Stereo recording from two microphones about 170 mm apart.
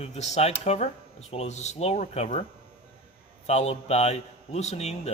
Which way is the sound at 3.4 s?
40° left (ahead or behind).